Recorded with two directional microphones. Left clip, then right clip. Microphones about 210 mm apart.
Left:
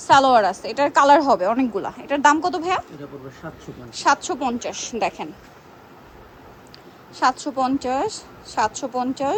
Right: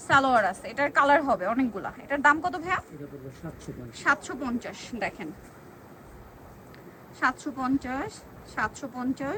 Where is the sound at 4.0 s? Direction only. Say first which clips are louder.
Left 7 dB; 15° left (ahead or behind).